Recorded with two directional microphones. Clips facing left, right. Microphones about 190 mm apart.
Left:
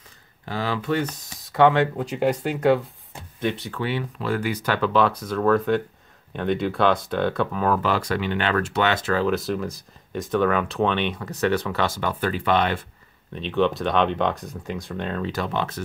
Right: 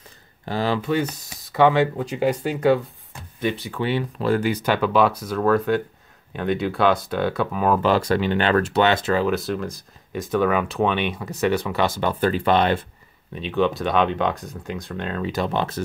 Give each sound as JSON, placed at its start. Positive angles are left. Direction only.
{"t": 0.5, "sound": "speech", "side_deg": -30}
{"t": 0.8, "sound": "speech", "side_deg": -10}
{"t": 3.8, "sound": "speech", "side_deg": -30}
{"t": 4.7, "sound": "speech", "side_deg": -10}
{"t": 7.6, "sound": "speech", "side_deg": -25}
{"t": 9.2, "sound": "speech", "side_deg": 0}
{"t": 12.0, "sound": "speech", "side_deg": -30}
{"t": 13.3, "sound": "speech", "side_deg": -5}
{"t": 15.3, "sound": "speech", "side_deg": -25}